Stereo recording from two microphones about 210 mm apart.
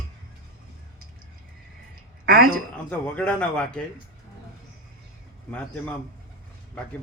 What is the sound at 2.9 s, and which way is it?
Speech, 5° left (ahead or behind).